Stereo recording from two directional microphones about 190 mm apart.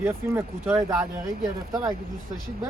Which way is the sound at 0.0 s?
15° right (ahead or behind).